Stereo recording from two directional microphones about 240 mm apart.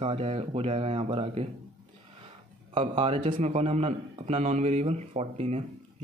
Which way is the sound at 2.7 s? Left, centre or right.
Right.